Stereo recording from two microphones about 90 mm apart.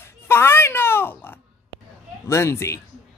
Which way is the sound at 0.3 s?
25° left (ahead or behind).